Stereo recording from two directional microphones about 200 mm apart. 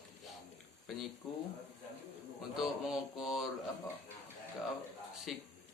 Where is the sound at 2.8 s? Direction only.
Centre (ahead or behind).